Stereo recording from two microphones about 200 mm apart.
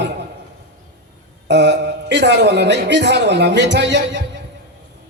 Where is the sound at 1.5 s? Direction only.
60° right (ahead or behind).